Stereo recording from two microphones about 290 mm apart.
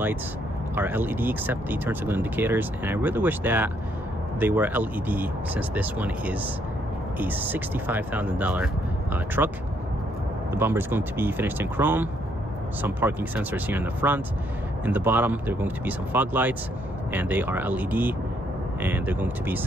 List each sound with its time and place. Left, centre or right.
0.7 s speech: centre
10.5 s speech: centre